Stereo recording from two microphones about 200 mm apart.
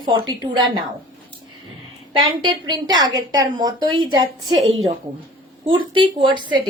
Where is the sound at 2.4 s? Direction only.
20° right (ahead or behind).